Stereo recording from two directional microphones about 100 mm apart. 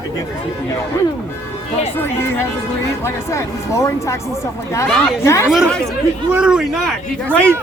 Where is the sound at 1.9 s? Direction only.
20° left (ahead or behind).